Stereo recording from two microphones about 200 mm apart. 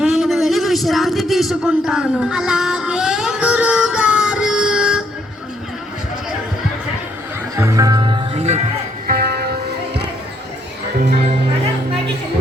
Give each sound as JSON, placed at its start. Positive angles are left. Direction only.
{"t": 0.0, "sound": "a sound", "side_deg": 0}
{"t": 7.5, "sound": "music", "side_deg": -15}
{"t": 9.0, "sound": "music", "side_deg": -50}